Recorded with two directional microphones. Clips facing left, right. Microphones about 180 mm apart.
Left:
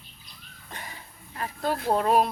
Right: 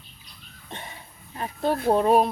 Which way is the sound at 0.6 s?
25° right (ahead or behind).